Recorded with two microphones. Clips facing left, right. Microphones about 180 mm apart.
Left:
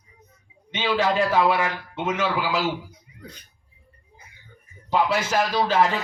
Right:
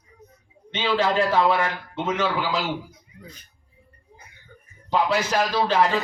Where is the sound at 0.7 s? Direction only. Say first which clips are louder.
Even; 5° left (ahead or behind).